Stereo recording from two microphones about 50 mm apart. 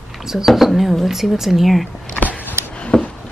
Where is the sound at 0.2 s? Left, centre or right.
Centre.